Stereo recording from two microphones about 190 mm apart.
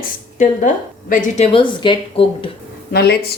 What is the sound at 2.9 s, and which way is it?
Speech, 60° left (ahead or behind).